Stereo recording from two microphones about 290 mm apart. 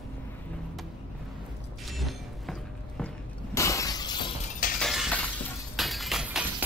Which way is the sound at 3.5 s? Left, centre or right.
Centre.